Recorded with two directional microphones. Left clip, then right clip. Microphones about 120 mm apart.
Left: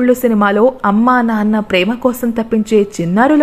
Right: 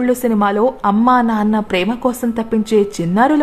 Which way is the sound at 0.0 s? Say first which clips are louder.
Left 3 dB; 25° left (ahead or behind).